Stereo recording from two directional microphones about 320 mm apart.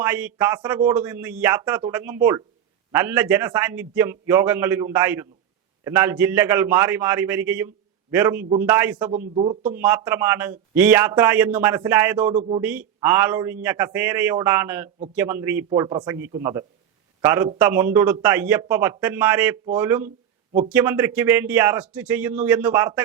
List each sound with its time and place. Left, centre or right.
0.0 s a man's voice: centre
9.2 s a man's voice: centre
9.6 s a man's voice: centre
12.3 s a man's voice: centre
12.6 s a man's voice: centre